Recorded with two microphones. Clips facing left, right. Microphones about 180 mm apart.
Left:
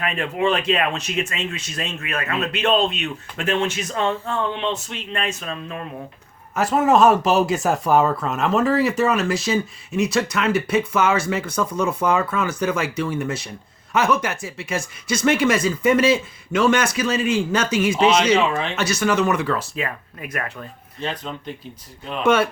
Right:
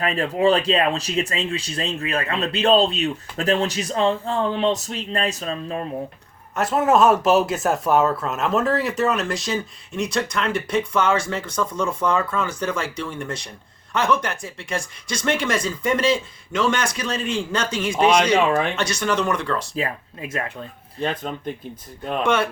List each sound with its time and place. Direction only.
0.0 s speech: 35° right (ahead or behind)
6.6 s speech: centre (ahead or behind)
19.7 s speech: 30° right (ahead or behind)
21.0 s speech: 50° right (ahead or behind)
22.2 s speech: 5° left (ahead or behind)